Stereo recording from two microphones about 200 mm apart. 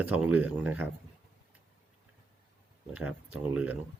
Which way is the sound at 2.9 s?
5° right (ahead or behind).